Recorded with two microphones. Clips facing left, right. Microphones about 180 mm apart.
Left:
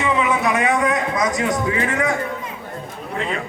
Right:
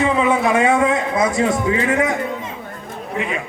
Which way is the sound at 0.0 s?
30° right (ahead or behind).